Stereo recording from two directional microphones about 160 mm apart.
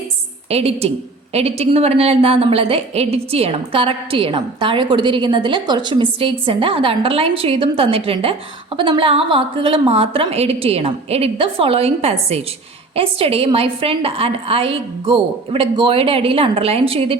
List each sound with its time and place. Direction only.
0.5 s a woman's voice: 40° right (ahead or behind)